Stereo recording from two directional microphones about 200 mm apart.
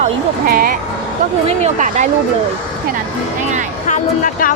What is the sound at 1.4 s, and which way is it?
Speech, 35° right (ahead or behind).